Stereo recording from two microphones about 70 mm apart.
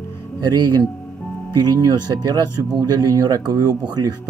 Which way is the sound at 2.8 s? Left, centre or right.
Right.